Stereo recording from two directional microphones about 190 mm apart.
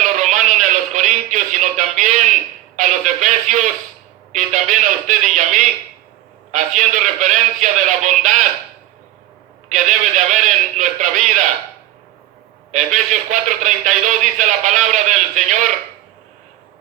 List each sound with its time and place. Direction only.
0.0 s a sound: 40° right (ahead or behind)
2.7 s a man's voice: 40° right (ahead or behind)
9.6 s a man's voice: 40° right (ahead or behind)
12.7 s a man's voice: 40° right (ahead or behind)